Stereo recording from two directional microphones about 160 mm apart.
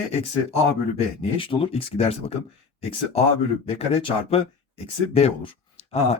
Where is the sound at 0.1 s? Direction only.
40° left (ahead or behind).